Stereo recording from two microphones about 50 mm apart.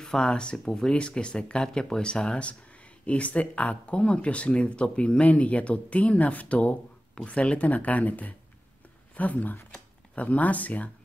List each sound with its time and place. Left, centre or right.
0.0 s speech: centre; by 10.9 s left